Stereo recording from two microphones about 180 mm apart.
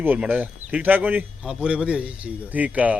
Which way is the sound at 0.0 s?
10° right (ahead or behind).